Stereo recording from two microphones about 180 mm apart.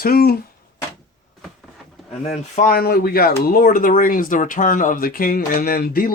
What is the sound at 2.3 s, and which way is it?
Speech, 45° left (ahead or behind).